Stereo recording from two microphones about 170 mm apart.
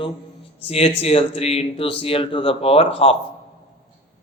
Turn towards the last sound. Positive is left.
turn(degrees=35)  # may be behind; listen again after turning